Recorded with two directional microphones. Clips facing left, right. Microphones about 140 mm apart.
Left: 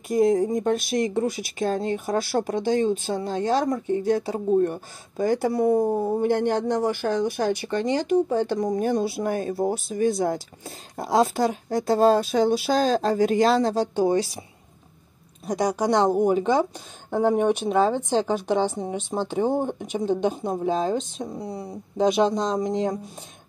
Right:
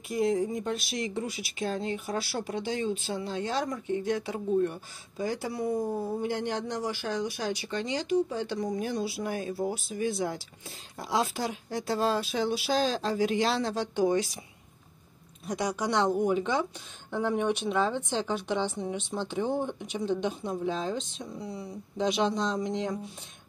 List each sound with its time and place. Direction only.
0.1 s speech: 45° left (ahead or behind)
15.4 s speech: 40° left (ahead or behind)